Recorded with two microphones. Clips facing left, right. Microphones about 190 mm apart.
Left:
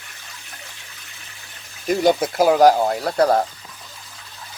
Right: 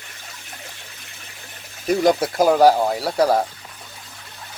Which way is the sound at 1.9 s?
Centre (ahead or behind).